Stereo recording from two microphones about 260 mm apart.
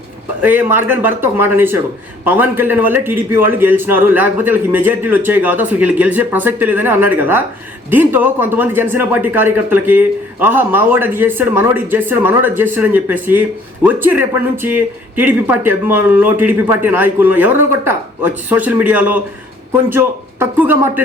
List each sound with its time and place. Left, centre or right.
0.4 s speech: centre